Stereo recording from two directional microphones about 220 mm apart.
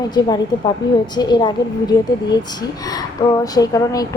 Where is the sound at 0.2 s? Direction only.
20° left (ahead or behind).